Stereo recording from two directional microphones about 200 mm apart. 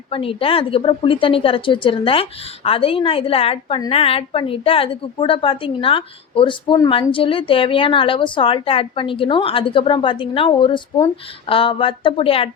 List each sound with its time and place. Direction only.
0.1 s a woman's voice: 25° left (ahead or behind)